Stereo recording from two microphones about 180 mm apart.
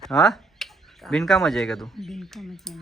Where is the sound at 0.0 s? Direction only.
Centre (ahead or behind).